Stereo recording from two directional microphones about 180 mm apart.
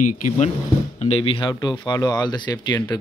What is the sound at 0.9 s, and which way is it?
Speech, 35° left (ahead or behind).